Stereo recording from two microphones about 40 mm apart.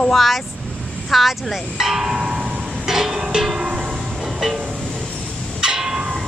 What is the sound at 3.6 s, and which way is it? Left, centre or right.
Music, right.